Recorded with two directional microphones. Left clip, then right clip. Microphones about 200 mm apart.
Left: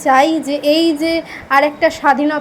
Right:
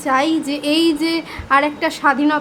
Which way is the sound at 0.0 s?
10° left (ahead or behind).